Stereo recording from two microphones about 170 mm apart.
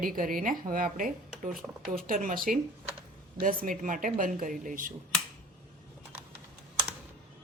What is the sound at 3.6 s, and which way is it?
Speech, 50° right (ahead or behind).